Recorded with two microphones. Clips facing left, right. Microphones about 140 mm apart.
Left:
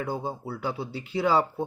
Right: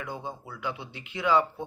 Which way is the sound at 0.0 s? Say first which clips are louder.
Left 6 dB; 35° left (ahead or behind).